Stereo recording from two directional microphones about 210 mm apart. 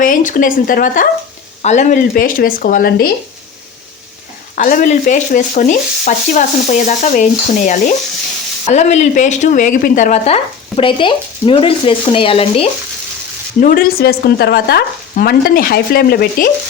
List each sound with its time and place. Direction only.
0.0 s stir: 40° left (ahead or behind)
4.5 s stir: 40° left (ahead or behind)
8.7 s speech: 30° left (ahead or behind)
13.6 s speech: 40° left (ahead or behind)